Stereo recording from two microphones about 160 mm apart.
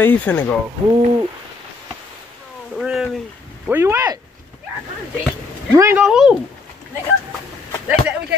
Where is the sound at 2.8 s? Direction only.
5° right (ahead or behind).